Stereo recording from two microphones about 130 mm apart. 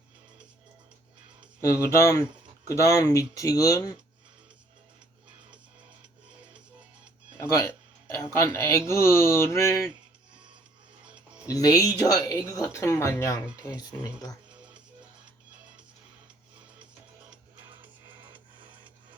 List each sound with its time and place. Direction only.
1.6 s speech: 20° left (ahead or behind)
7.3 s speech: 25° left (ahead or behind)
11.4 s speech: 25° left (ahead or behind)
17.7 s music: 35° right (ahead or behind)